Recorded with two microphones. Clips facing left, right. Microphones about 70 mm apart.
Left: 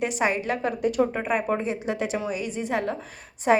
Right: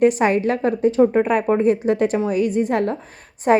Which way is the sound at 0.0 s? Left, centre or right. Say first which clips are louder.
Right 9 dB; right.